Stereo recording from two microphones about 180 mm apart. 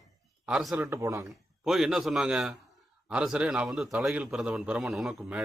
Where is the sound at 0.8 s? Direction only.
15° right (ahead or behind).